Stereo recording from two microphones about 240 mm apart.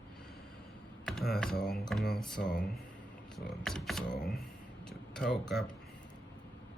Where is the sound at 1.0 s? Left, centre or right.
Centre.